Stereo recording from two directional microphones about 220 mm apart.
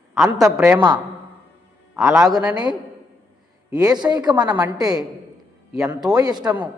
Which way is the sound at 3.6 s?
15° right (ahead or behind).